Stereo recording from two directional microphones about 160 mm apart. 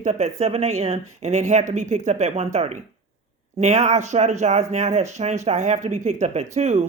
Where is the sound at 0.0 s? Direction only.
45° right (ahead or behind).